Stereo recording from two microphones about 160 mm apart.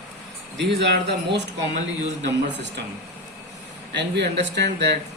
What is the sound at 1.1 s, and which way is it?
Speech, 90° right.